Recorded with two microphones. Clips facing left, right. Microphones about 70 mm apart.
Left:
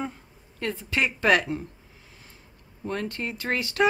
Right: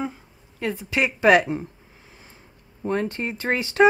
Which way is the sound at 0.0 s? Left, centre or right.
Centre.